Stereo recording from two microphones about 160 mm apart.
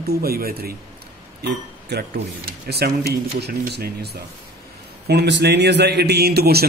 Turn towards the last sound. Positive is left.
turn(degrees=-80)